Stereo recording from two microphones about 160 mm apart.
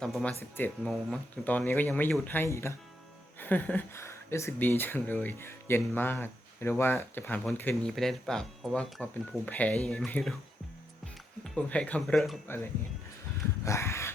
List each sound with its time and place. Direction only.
0.0 s speech: 5° left (ahead or behind)
11.5 s speech: 5° left (ahead or behind)
13.7 s a sound: 15° left (ahead or behind)